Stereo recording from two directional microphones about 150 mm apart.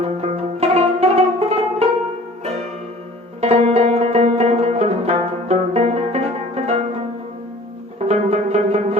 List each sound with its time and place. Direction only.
0.0 s music: 45° right (ahead or behind)
3.4 s music: 45° right (ahead or behind)
7.9 s music: 45° right (ahead or behind)